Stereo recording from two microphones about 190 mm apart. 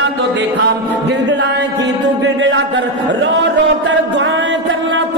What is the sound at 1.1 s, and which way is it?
Speech, 70° right (ahead or behind).